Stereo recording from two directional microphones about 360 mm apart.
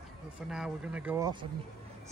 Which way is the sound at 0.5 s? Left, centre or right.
Centre.